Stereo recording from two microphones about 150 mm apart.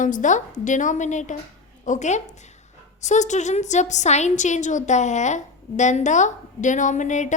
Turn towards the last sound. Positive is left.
turn(degrees=55)  # may be behind; listen again after turning